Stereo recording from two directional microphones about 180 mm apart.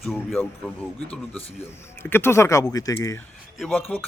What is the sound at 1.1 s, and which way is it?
Speech, 10° left (ahead or behind).